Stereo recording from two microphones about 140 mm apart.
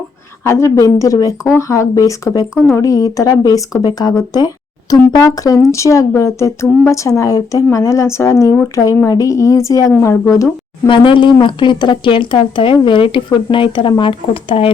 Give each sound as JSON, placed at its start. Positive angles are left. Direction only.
{"t": 0.4, "sound": "speech", "side_deg": 20}
{"t": 4.4, "sound": "a sound", "side_deg": 25}
{"t": 5.1, "sound": "speech", "side_deg": 25}
{"t": 10.8, "sound": "speech", "side_deg": 35}